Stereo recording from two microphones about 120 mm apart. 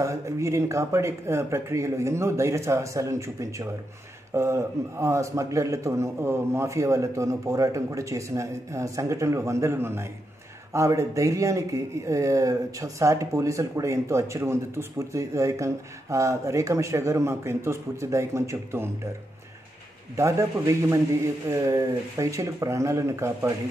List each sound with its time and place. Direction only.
0.0 s speech: 25° right (ahead or behind)
20.2 s speech: 25° right (ahead or behind)